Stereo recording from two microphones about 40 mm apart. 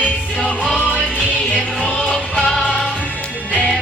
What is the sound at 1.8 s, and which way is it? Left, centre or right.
Music, left.